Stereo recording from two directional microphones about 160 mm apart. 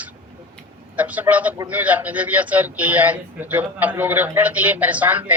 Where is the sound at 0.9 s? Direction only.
10° right (ahead or behind).